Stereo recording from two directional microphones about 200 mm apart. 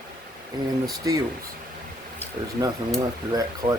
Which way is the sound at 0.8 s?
20° right (ahead or behind).